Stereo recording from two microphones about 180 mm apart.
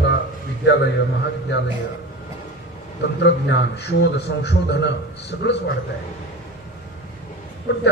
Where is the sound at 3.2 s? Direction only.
75° left (ahead or behind).